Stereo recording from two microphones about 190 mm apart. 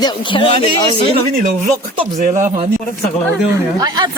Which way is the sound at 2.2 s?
45° right (ahead or behind).